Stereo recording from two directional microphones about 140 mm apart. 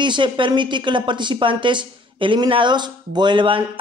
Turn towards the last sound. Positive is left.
turn(degrees=-35)  # may be behind; listen again after turning